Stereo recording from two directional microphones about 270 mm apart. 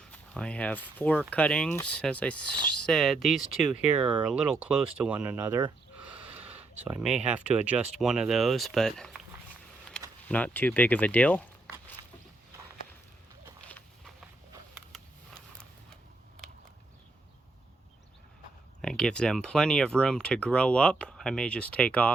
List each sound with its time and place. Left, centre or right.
0.0 s speech: centre
6.1 s gasp: centre
6.8 s speech: centre
10.2 s speech: centre
13.7 s a sound: centre
18.8 s speech: centre